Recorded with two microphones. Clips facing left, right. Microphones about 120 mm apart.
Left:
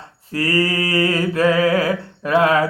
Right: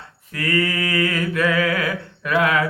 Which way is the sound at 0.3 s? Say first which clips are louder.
Left 3 dB; 30° left (ahead or behind).